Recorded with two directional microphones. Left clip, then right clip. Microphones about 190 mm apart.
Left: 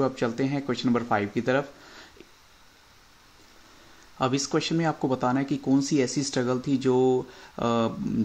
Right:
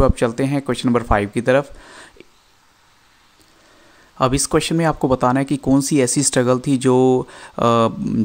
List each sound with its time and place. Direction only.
0.0 s speech: 45° right (ahead or behind)
4.2 s speech: 45° right (ahead or behind)